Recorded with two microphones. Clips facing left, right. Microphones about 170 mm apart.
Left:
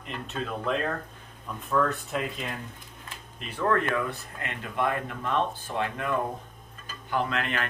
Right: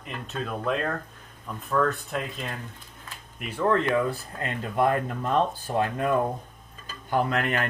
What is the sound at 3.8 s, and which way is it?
Speech, 30° right (ahead or behind).